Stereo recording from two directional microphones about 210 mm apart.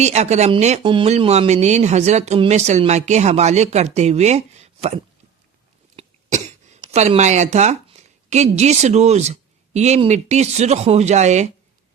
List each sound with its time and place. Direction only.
0.0 s speech: 30° right (ahead or behind)
6.0 s speech: 30° right (ahead or behind)